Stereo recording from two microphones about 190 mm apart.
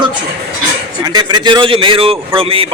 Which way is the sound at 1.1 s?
20° right (ahead or behind).